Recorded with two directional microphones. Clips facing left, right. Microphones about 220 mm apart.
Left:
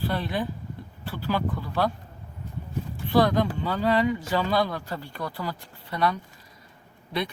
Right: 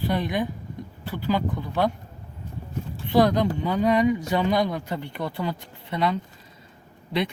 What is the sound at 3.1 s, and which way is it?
Speech, 20° right (ahead or behind).